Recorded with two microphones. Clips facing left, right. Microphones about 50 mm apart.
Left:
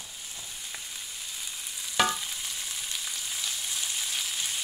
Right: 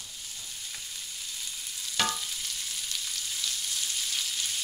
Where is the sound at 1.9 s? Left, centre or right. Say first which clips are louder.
Left 4 dB; centre.